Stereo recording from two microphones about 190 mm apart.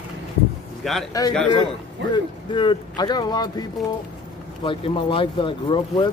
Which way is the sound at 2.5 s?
25° left (ahead or behind).